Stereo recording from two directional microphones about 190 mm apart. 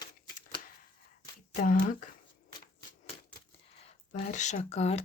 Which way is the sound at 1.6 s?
45° left (ahead or behind).